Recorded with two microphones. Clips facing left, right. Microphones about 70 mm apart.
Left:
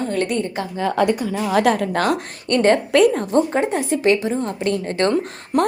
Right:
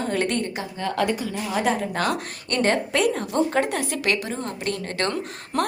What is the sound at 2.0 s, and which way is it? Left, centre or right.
A woman's voice, left.